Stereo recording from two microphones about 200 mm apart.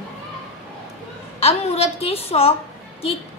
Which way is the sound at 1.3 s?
30° left (ahead or behind).